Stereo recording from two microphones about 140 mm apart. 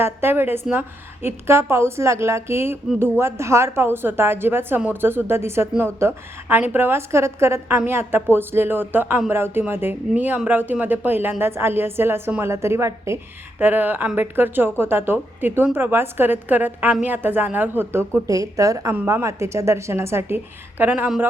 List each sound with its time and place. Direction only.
0.0 s speech: 15° right (ahead or behind)